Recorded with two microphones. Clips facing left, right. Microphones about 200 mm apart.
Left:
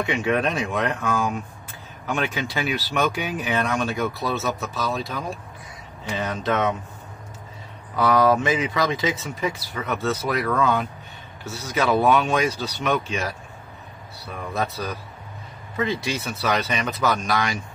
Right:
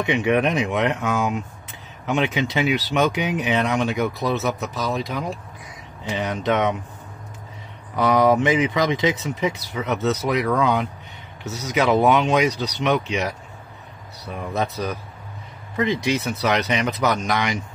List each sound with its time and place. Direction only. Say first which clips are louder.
0.0 s speech: right 3 dB; 20° right (ahead or behind)
7.9 s speech: right 1 dB; 20° right (ahead or behind)